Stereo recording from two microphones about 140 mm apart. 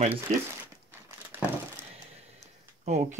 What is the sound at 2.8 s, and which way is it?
Speech, 55° right (ahead or behind).